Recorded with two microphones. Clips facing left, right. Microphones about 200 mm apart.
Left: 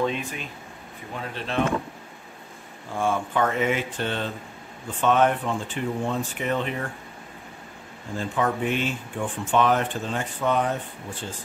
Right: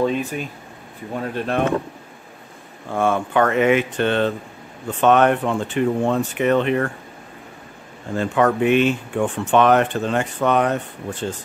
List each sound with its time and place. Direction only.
0.0 s speech: 40° right (ahead or behind)
2.9 s speech: 70° right (ahead or behind)
8.1 s speech: 70° right (ahead or behind)